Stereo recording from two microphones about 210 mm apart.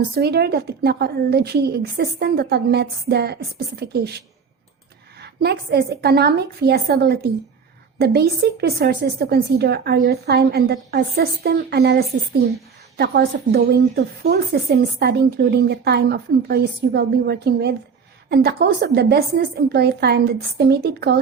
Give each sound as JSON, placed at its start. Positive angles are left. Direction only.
{"t": 0.1, "sound": "speech", "side_deg": -50}
{"t": 5.2, "sound": "speech", "side_deg": -50}